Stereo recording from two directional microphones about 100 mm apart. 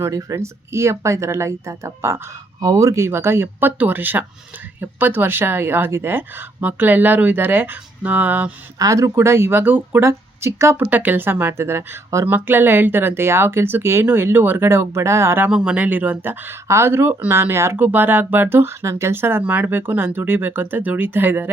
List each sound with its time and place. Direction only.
0.0 s speech: 35° right (ahead or behind); by 8.5 s 15° right (ahead or behind)
8.8 s speech: 35° right (ahead or behind)
10.8 s speech: 15° right (ahead or behind)
15.4 s speech: 10° right (ahead or behind)